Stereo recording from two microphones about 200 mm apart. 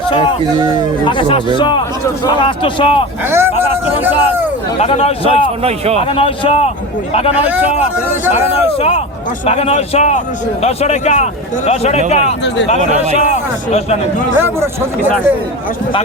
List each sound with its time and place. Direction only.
0.1 s speech: 25° left (ahead or behind)
3.2 s speech: 10° right (ahead or behind)
3.6 s a sound: 10° right (ahead or behind)
4.8 s speech: 30° left (ahead or behind)
5.3 s speech: 30° right (ahead or behind)
6.0 s speech: 25° left (ahead or behind)
7.3 s speech: 5° right (ahead or behind)
7.6 s speech: 30° left (ahead or behind)
12.8 s speech: 35° right (ahead or behind)
13.2 s speech: 35° left (ahead or behind)